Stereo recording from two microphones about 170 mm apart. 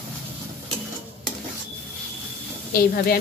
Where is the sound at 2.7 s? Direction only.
60° left (ahead or behind).